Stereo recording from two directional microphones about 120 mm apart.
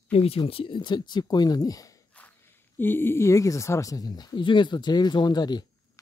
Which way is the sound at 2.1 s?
15° left (ahead or behind).